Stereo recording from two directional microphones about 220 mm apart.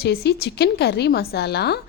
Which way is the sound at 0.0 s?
45° left (ahead or behind).